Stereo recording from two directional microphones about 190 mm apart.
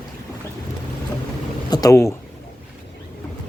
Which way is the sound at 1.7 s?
20° left (ahead or behind).